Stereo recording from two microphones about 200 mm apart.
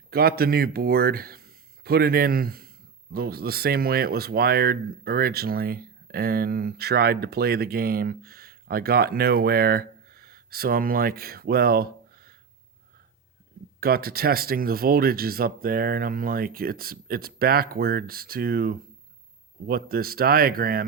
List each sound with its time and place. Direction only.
0.1 s speech: 50° right (ahead or behind)
13.7 s speech: 50° right (ahead or behind)